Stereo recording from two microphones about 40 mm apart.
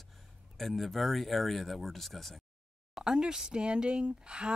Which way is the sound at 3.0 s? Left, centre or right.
Centre.